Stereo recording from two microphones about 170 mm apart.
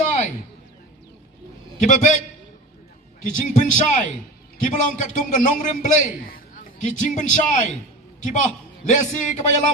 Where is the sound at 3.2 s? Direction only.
50° left (ahead or behind).